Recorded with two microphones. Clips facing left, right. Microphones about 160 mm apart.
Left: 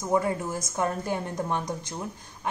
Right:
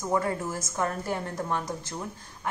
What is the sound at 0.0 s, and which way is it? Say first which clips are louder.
A woman's voice: left 2 dB; 15° left (ahead or behind).